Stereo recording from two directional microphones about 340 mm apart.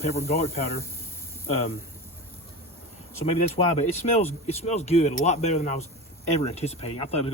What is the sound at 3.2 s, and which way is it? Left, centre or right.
Speech, centre.